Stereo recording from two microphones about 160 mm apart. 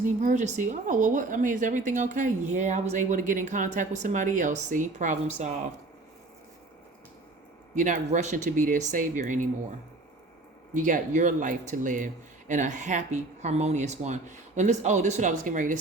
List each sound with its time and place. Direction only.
0.0 s a woman's voice: 50° right (ahead or behind)
7.8 s a woman's voice: 55° right (ahead or behind)
10.8 s a woman's voice: 55° right (ahead or behind)